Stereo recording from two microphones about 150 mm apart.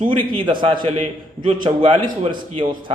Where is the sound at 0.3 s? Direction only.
35° right (ahead or behind).